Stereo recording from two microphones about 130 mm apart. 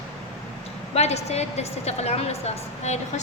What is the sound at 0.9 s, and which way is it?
A woman's voice, 55° left (ahead or behind).